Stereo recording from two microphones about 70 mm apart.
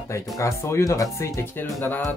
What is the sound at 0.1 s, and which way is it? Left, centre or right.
Speech, left.